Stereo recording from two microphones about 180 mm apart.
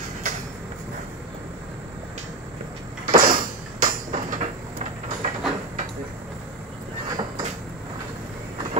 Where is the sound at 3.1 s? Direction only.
50° right (ahead or behind).